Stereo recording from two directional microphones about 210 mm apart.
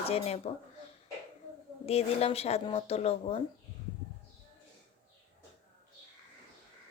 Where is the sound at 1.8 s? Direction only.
30° left (ahead or behind).